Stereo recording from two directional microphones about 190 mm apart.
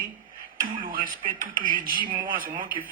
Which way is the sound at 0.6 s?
45° right (ahead or behind).